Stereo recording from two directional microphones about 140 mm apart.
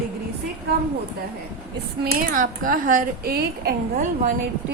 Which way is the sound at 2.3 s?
80° right.